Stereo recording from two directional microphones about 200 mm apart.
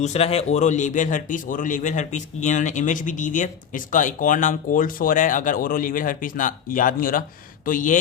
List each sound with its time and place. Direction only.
0.0 s a man's voice: 30° left (ahead or behind)